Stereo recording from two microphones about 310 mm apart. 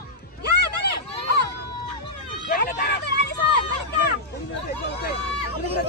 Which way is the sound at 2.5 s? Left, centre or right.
Left.